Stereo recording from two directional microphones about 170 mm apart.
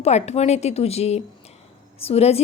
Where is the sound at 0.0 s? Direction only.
40° left (ahead or behind).